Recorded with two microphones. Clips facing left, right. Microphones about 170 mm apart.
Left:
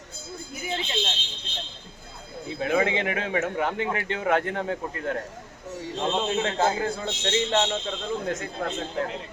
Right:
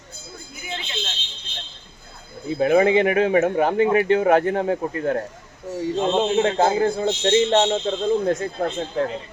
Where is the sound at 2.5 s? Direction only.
35° right (ahead or behind).